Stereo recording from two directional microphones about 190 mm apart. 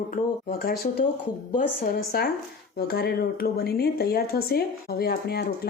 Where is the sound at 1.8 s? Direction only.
50° left (ahead or behind).